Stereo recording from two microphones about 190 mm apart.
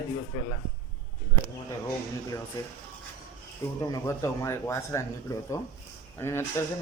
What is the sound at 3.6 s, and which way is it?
Speech, 15° left (ahead or behind).